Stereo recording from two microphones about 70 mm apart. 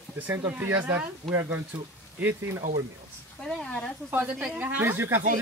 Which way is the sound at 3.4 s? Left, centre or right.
Centre.